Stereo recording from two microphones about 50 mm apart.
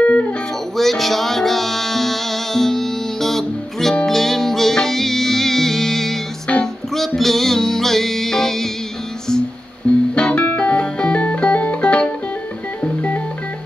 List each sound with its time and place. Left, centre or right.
0.0 s music: left
0.7 s music: centre
10.1 s music: left
12.8 s music: left